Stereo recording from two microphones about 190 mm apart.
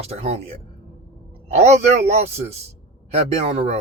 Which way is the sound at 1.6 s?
35° right (ahead or behind).